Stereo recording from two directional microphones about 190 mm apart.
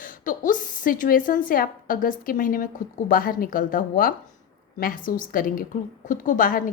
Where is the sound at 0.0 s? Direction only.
45° left (ahead or behind).